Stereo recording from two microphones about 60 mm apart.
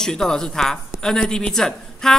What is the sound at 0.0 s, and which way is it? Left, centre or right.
Speech, centre.